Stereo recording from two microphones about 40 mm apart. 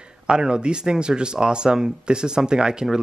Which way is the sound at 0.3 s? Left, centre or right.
Right.